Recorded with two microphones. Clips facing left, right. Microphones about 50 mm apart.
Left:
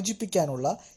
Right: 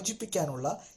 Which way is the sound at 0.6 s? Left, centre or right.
Left.